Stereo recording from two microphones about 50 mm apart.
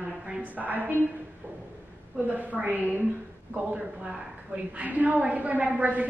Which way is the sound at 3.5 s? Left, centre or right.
Right.